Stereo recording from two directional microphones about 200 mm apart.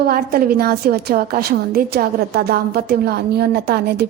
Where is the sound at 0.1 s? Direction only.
50° right (ahead or behind).